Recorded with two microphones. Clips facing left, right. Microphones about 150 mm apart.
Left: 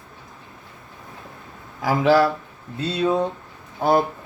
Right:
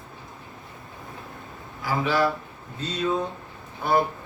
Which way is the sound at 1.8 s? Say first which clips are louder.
Left 8 dB; 90° left.